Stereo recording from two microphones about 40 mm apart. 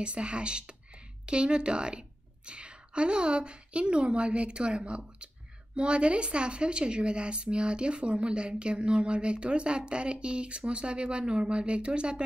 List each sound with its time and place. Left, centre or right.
0.0 s a woman's voice: right